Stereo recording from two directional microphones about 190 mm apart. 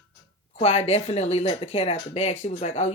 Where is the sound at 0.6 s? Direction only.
35° left (ahead or behind).